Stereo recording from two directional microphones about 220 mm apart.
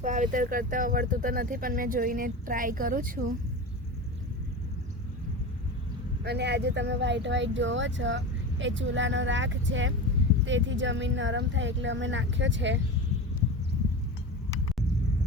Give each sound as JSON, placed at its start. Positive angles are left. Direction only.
{"t": 0.0, "sound": "speech", "side_deg": -35}
{"t": 6.2, "sound": "speech", "side_deg": -50}